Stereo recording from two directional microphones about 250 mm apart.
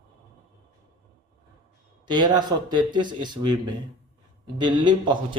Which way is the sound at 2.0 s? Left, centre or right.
Centre.